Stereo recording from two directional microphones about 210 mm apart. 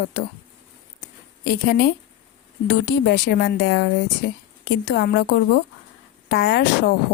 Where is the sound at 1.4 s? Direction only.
50° left (ahead or behind).